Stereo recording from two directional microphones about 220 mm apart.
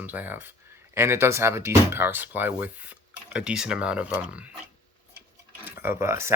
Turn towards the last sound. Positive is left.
turn(degrees=-10)  # may be behind; listen again after turning